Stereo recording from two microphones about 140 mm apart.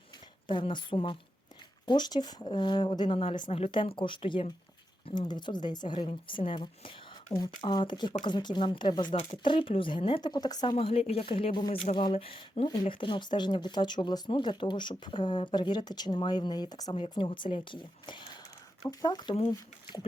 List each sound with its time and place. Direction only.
0.4 s speech: 35° left (ahead or behind)
10.8 s speech: 45° left (ahead or behind); by 16.9 s 30° left (ahead or behind)
16.9 s speech: 40° left (ahead or behind)